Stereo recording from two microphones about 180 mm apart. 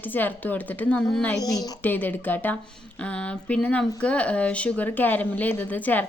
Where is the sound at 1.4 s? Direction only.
20° left (ahead or behind).